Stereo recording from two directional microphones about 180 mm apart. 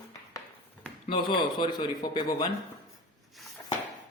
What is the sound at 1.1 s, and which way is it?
A man's voice, 25° left (ahead or behind).